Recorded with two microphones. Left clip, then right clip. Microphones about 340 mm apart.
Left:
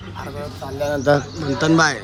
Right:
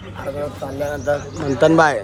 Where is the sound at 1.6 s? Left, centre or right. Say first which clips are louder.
Right 4 dB; centre.